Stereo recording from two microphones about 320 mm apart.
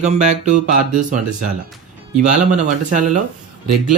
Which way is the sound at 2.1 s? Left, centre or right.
Right.